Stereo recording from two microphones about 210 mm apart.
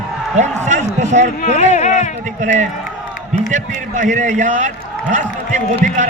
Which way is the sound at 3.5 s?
35° right (ahead or behind).